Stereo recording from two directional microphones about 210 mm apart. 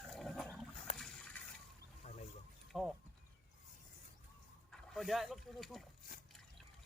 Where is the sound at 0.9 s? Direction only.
5° left (ahead or behind).